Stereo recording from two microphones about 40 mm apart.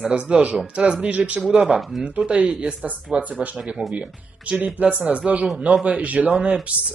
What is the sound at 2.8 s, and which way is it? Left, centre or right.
A man's voice, right.